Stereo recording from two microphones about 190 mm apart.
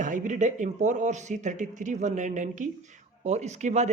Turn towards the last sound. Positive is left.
turn(degrees=-35)  # may be behind; listen again after turning